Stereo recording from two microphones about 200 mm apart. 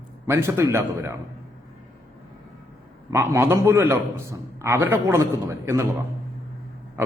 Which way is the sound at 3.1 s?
10° right (ahead or behind).